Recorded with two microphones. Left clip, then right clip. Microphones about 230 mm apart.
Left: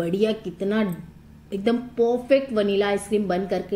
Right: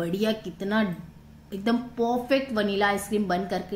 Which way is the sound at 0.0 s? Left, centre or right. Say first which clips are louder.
Left 4 dB; centre.